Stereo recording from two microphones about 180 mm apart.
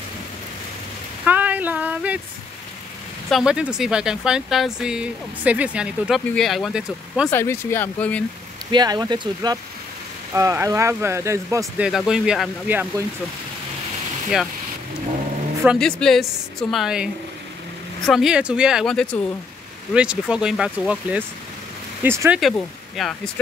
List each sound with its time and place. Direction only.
1.2 s a sound: 10° right (ahead or behind)
3.3 s speech: centre (ahead or behind)
7.2 s speech: 15° left (ahead or behind)
8.7 s speech: 20° right (ahead or behind)
12.1 s speech: 5° right (ahead or behind)
15.6 s speech: centre (ahead or behind)
22.4 s speech: 5° left (ahead or behind)